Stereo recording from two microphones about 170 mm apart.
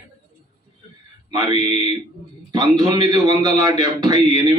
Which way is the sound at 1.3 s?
25° right (ahead or behind).